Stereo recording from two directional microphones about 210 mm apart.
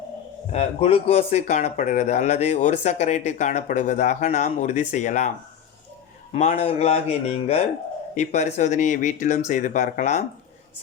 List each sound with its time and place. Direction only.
0.5 s speech: 30° left (ahead or behind)
6.3 s a man's voice: 30° left (ahead or behind)